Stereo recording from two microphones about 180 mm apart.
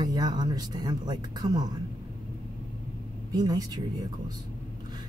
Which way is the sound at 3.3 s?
20° right (ahead or behind).